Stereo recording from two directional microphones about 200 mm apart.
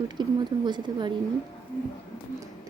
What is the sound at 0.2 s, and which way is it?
Speech, 20° right (ahead or behind).